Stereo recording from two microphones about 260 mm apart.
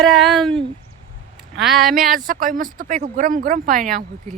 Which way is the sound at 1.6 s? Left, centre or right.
Centre.